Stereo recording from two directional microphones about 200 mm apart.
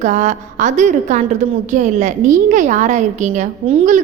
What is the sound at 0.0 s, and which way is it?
A woman's voice, 35° right (ahead or behind).